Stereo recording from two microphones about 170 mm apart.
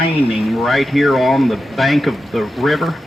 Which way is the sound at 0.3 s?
Centre (ahead or behind).